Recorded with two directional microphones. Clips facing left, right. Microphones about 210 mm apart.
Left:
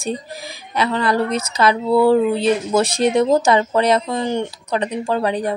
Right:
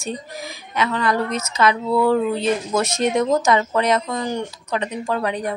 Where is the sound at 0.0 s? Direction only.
30° left (ahead or behind).